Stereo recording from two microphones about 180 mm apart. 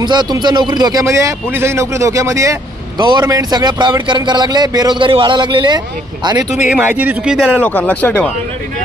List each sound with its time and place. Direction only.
0.0 s a man's voice: 25° right (ahead or behind)
6.7 s speech: 10° right (ahead or behind)
7.6 s speech: 5° left (ahead or behind)